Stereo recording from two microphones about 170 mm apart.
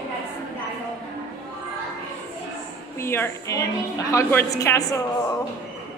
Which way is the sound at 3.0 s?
15° left (ahead or behind).